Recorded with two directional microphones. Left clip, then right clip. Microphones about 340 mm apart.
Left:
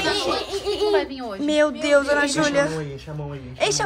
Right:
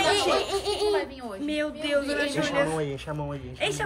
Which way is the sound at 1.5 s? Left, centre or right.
Left.